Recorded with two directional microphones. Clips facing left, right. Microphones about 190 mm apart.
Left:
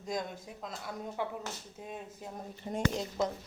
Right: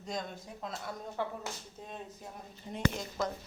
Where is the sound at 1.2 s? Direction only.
15° left (ahead or behind).